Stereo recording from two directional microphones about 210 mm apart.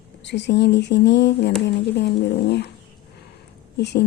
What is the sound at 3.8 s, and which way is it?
Speech, 55° left (ahead or behind).